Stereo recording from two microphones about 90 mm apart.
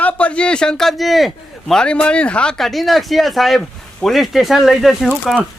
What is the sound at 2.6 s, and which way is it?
Speech, centre (ahead or behind).